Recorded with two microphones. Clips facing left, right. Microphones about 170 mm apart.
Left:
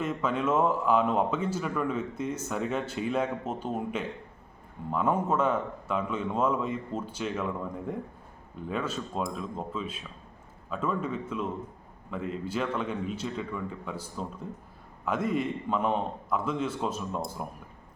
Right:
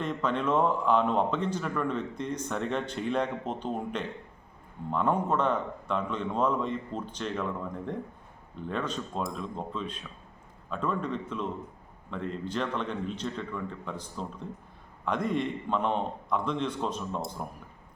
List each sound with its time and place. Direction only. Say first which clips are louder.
0.0 s a man's voice: left 1 dB; 5° left (ahead or behind)